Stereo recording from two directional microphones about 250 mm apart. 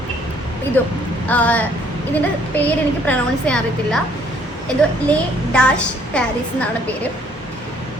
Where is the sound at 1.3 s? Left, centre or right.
Centre.